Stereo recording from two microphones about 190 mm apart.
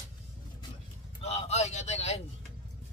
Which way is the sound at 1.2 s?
35° left (ahead or behind).